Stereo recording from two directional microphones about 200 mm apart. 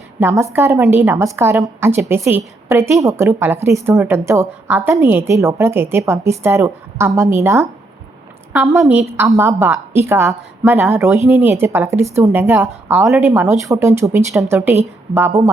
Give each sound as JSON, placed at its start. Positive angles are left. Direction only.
{"t": 0.2, "sound": "a woman's voice", "side_deg": -15}